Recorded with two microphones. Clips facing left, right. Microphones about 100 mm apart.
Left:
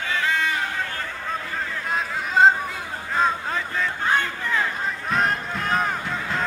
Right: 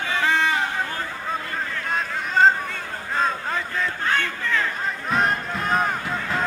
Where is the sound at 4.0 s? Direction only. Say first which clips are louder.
Left 2 dB; 20° left (ahead or behind).